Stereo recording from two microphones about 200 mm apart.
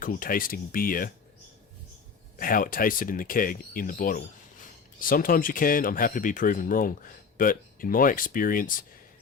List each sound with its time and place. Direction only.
0.0 s speech: 45° left (ahead or behind)
2.3 s speech: 45° left (ahead or behind)